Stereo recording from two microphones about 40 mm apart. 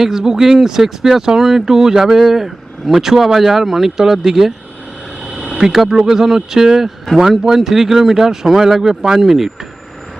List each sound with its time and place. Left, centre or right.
0.0 s speech: centre
5.5 s vehicle: right
5.7 s speech: centre